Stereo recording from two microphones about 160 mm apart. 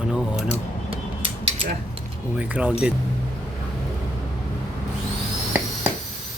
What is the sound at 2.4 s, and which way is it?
Speech, 10° right (ahead or behind).